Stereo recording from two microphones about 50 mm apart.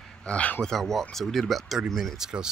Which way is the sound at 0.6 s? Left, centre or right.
Centre.